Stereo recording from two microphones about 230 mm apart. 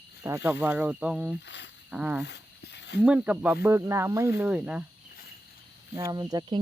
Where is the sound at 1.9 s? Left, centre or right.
Centre.